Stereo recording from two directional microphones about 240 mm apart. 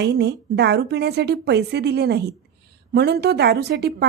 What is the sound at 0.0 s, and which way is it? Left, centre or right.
A woman's voice, right.